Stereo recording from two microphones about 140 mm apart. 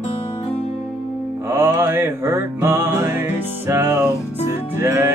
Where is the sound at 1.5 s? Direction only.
15° right (ahead or behind).